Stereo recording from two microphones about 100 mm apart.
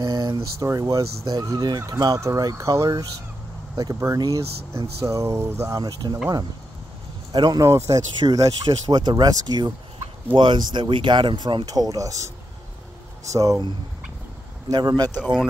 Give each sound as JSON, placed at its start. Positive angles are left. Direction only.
{"t": 0.0, "sound": "speech", "side_deg": -35}
{"t": 5.8, "sound": "speech", "side_deg": -45}
{"t": 7.3, "sound": "speech", "side_deg": -45}
{"t": 7.6, "sound": "speech", "side_deg": -30}
{"t": 14.7, "sound": "speech", "side_deg": -40}